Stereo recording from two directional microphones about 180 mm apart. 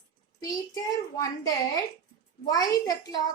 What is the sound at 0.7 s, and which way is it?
A woman's voice, 20° left (ahead or behind).